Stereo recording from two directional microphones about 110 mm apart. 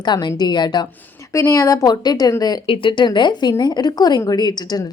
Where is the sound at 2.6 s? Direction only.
50° left (ahead or behind).